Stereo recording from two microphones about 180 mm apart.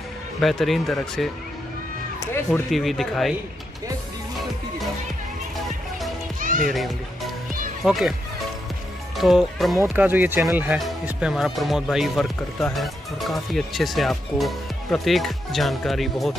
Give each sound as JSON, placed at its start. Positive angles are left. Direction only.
{"t": 0.4, "sound": "speech", "side_deg": 0}
{"t": 2.1, "sound": "speech", "side_deg": 15}
{"t": 2.7, "sound": "speech", "side_deg": 0}
{"t": 6.4, "sound": "music", "side_deg": -50}
{"t": 7.8, "sound": "speech", "side_deg": 0}
{"t": 9.1, "sound": "speech", "side_deg": 0}